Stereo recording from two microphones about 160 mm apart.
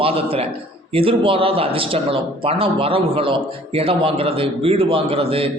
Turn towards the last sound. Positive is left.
turn(degrees=-35)  # may be behind; listen again after turning